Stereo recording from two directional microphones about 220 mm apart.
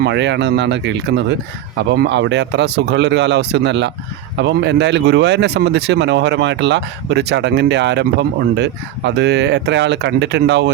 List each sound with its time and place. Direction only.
0.0 s speech: 55° right (ahead or behind)